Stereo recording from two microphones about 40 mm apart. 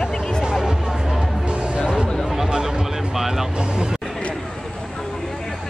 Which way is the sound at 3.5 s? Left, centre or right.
Right.